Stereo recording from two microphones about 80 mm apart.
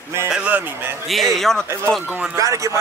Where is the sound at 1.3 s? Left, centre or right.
Centre.